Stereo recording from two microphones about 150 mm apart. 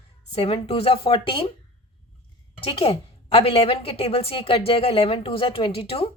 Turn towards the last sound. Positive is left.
turn(degrees=40)  # may be behind; listen again after turning